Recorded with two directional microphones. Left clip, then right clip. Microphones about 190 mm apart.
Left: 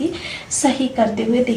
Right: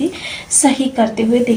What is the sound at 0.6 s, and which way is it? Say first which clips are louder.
Speech: right 3 dB; 35° right (ahead or behind).